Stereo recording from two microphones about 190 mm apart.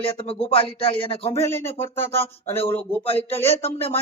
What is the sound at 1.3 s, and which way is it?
Speech, 15° left (ahead or behind).